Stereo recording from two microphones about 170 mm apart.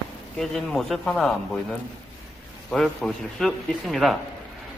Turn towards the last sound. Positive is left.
turn(degrees=0)  # may be behind; listen again after turning